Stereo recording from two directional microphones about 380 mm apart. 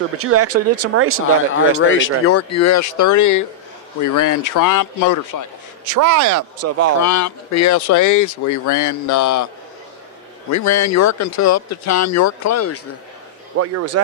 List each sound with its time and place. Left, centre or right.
0.2 s speech: right
1.9 s speech: left
5.9 s speech: right
7.0 s speech: left
10.5 s speech: left
13.6 s speech: right